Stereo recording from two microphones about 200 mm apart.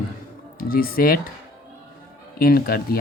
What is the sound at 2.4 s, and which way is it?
Speech, 50° left (ahead or behind).